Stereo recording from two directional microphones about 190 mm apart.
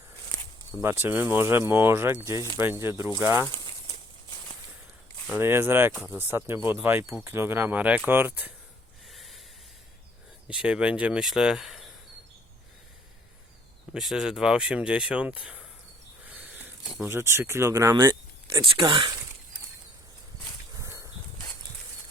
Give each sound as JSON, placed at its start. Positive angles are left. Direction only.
{"t": 0.8, "sound": "speech", "side_deg": -10}
{"t": 3.4, "sound": "speech", "side_deg": 10}
{"t": 5.3, "sound": "speech", "side_deg": -10}
{"t": 9.0, "sound": "snort", "side_deg": 0}
{"t": 10.5, "sound": "speech", "side_deg": -5}
{"t": 13.9, "sound": "speech", "side_deg": 0}
{"t": 16.2, "sound": "a sound", "side_deg": -10}
{"t": 17.0, "sound": "speech", "side_deg": -10}
{"t": 18.6, "sound": "speech", "side_deg": -25}
{"t": 20.8, "sound": "a sound", "side_deg": -15}